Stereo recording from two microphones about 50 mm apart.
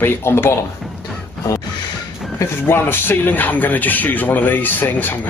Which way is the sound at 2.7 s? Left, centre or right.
Left.